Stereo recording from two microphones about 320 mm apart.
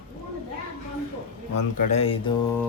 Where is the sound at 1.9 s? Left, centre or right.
Centre.